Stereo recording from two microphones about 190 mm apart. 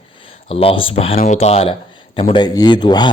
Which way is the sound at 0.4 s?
30° left (ahead or behind).